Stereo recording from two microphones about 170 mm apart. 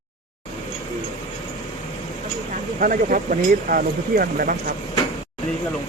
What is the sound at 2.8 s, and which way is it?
Speech, 55° right (ahead or behind).